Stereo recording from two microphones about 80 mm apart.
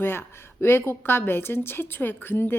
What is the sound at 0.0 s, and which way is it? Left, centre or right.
A woman's voice, left.